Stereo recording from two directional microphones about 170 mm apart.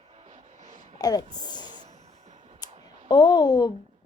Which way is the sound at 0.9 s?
20° left (ahead or behind).